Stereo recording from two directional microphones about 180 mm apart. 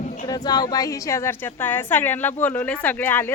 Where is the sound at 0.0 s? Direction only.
45° left (ahead or behind).